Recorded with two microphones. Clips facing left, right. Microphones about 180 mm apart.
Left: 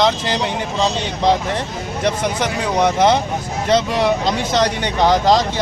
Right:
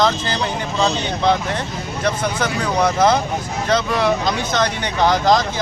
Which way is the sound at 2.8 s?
25° left (ahead or behind).